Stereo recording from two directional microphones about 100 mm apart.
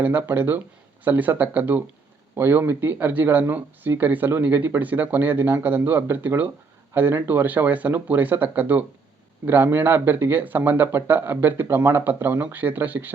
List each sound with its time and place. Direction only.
0.0 s speech: 20° right (ahead or behind)